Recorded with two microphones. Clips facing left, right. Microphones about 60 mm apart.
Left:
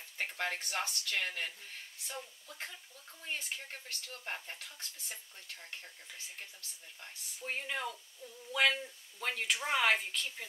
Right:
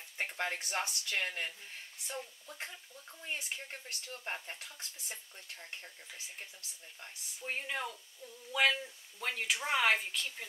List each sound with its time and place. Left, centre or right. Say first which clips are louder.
0.2 s speech: even; centre
7.3 s speech: even; centre
8.2 s a sound: even; centre
8.8 s speech: even; centre